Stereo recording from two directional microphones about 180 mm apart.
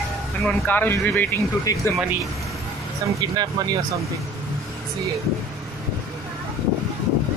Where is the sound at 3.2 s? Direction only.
20° right (ahead or behind).